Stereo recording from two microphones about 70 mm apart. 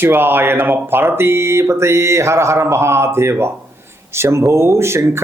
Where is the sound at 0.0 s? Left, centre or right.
Right.